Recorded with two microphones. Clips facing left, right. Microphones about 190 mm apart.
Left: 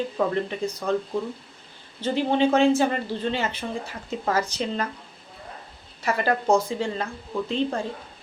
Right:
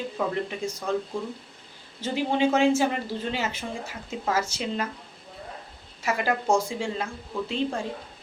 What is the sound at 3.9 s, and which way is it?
Speech, 5° right (ahead or behind).